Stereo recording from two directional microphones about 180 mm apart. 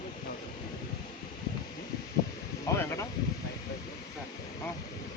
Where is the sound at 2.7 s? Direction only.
20° left (ahead or behind).